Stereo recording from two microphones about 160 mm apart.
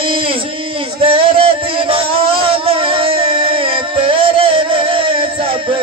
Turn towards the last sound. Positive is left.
turn(degrees=-35)  # may be behind; listen again after turning